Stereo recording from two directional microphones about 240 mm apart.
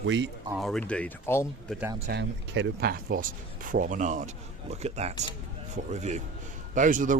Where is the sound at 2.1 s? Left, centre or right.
Right.